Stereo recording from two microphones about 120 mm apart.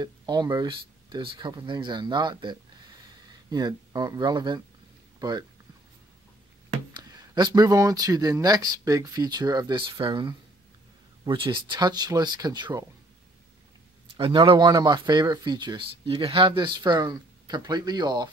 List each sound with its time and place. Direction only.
0.0 s speech: 35° right (ahead or behind)
6.9 s speech: 35° right (ahead or behind)
14.1 s speech: 40° right (ahead or behind)